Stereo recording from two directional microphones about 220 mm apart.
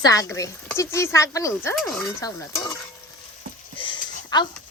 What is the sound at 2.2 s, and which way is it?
Speech, 15° left (ahead or behind).